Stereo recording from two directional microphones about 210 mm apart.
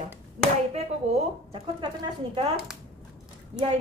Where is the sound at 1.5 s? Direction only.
25° right (ahead or behind).